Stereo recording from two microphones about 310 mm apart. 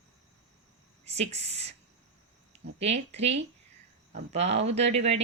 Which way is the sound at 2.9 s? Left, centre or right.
Right.